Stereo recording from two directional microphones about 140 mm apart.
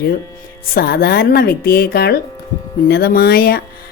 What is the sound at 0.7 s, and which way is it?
Speech, 90° left.